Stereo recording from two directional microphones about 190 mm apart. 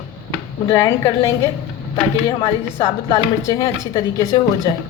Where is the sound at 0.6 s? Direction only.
15° left (ahead or behind).